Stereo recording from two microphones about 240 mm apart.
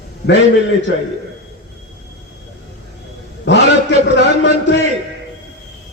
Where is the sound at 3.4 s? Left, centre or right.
Left.